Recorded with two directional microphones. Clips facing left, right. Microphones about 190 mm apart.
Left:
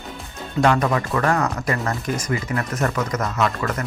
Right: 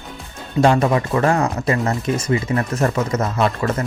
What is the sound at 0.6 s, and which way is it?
Speech, 25° right (ahead or behind).